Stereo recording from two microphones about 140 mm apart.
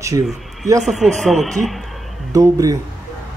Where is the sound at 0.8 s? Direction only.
Centre (ahead or behind).